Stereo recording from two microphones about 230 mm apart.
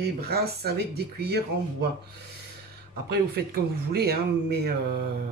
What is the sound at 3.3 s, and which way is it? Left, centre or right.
Speech, right.